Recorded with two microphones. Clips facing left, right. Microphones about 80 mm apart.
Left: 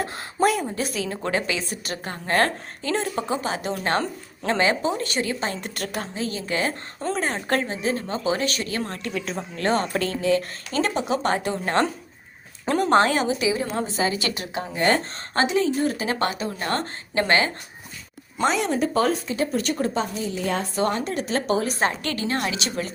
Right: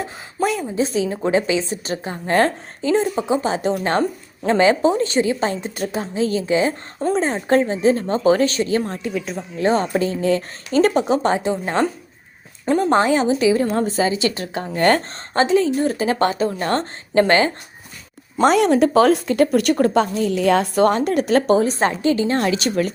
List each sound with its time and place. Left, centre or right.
0.0 s speech: centre
0.8 s a woman's voice: right
4.0 s a woman's voice: centre
4.6 s a woman's voice: right; by 7.6 s centre
7.7 s a woman's voice: right
8.8 s a woman's voice: centre
10.2 s speech: right
10.7 s a woman's voice: right
11.3 s a woman's voice: centre
13.8 s a woman's voice: right
18.4 s speech: right
20.7 s speech: right
21.5 s a woman's voice: right